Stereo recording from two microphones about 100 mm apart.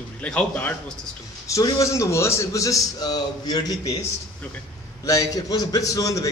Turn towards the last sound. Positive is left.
turn(degrees=35)  # may be behind; listen again after turning